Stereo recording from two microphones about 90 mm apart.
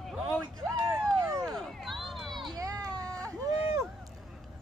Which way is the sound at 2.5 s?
40° right (ahead or behind).